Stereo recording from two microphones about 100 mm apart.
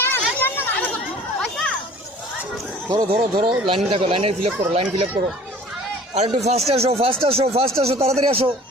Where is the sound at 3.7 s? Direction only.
70° right (ahead or behind).